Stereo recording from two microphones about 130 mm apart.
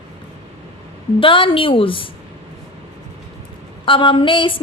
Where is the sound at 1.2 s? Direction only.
40° left (ahead or behind).